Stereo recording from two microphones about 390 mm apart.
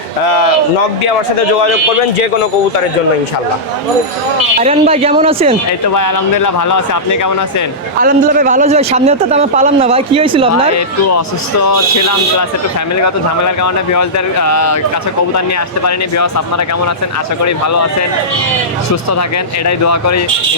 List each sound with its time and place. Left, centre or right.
4.6 s a man's voice: centre
5.9 s speech: left
8.0 s a man's voice: right
13.0 s speech: left
15.8 s speech: left
19.6 s speech: left